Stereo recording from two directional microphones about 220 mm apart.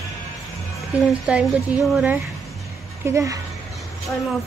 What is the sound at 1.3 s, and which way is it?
Speech, 5° right (ahead or behind).